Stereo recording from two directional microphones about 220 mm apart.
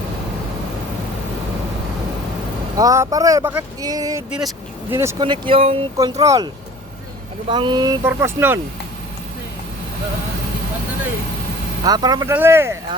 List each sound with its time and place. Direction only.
2.7 s speech: 15° right (ahead or behind)
4.3 s speech: 5° right (ahead or behind); by 5.8 s 25° right (ahead or behind)
6.0 s speech: 15° right (ahead or behind)
11.8 s speech: 15° right (ahead or behind)